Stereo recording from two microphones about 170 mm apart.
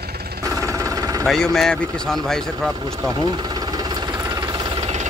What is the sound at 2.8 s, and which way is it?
Engine, 20° right (ahead or behind).